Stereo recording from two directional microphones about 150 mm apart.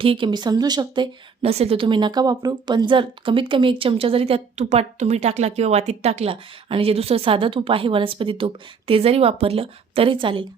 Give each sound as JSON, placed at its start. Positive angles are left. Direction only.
{"t": 0.0, "sound": "speech", "side_deg": -35}
{"t": 1.4, "sound": "a woman's voice", "side_deg": -40}